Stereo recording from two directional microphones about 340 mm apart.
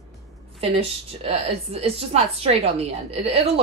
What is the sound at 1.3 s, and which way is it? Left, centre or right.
A woman's voice, centre.